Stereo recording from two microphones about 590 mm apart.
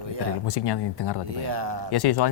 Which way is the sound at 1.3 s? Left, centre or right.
Right.